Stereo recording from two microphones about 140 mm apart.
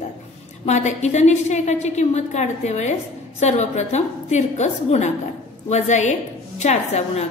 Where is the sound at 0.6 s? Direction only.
55° left (ahead or behind).